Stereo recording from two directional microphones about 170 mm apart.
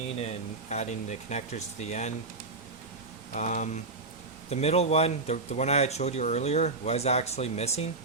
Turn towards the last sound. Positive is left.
turn(degrees=40)  # may be behind; listen again after turning